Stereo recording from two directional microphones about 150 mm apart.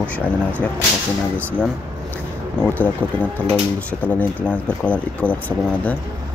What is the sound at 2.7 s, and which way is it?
Speech, 10° left (ahead or behind).